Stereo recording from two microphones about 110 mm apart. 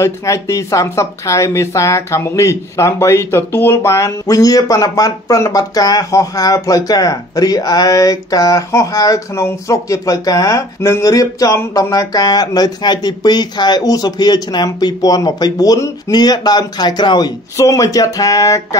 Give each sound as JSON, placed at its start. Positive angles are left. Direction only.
{"t": 0.0, "sound": "speech", "side_deg": 30}
{"t": 17.6, "sound": "speech", "side_deg": 30}